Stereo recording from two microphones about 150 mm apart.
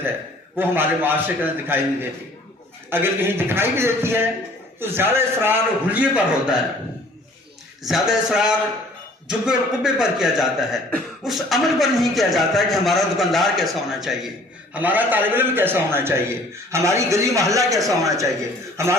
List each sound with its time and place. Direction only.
0.5 s a man's voice: 15° right (ahead or behind)
2.9 s a man's voice: 15° right (ahead or behind)
7.9 s a man's voice: 5° right (ahead or behind); by 18.9 s 20° right (ahead or behind)